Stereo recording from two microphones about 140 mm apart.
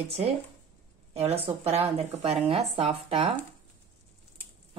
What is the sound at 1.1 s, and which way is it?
Speech, 45° right (ahead or behind).